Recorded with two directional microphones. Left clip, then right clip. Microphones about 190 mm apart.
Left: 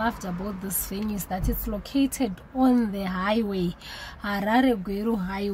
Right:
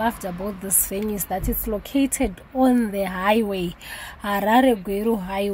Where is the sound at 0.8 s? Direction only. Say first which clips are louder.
Right 5 dB; 15° right (ahead or behind).